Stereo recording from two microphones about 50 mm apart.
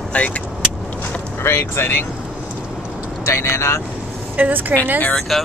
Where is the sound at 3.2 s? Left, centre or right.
Left.